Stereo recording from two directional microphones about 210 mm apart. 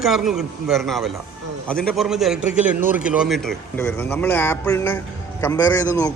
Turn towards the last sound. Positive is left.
turn(degrees=15)  # may be behind; listen again after turning